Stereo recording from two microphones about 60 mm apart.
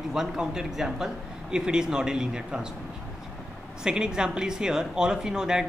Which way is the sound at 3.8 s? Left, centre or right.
Centre.